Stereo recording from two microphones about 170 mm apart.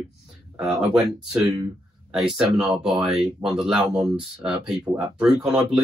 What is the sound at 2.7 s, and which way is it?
Speech, 5° right (ahead or behind).